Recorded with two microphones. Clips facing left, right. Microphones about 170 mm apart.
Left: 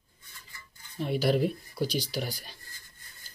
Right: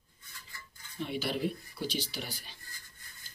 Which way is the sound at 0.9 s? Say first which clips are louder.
Left 8 dB; 45° left (ahead or behind).